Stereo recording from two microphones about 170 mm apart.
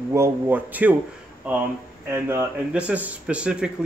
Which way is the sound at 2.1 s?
15° right (ahead or behind).